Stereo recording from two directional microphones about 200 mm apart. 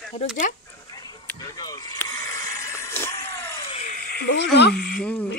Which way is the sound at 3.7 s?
35° left (ahead or behind).